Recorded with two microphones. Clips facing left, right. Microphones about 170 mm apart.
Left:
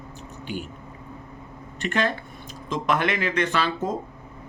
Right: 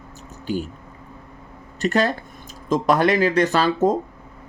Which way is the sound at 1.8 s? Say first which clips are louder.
Right 5 dB; 40° right (ahead or behind).